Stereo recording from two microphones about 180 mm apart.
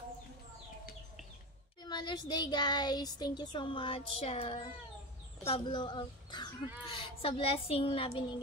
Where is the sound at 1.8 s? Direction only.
25° left (ahead or behind).